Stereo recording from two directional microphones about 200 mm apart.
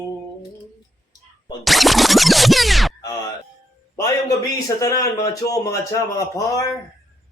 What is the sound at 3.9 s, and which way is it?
A man's voice, 15° left (ahead or behind).